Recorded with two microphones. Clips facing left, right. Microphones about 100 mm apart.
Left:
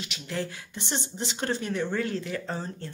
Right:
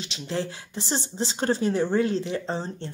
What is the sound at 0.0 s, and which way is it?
Speech, 30° right (ahead or behind).